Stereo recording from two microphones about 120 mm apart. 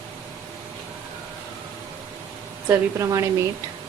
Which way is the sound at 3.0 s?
25° right (ahead or behind).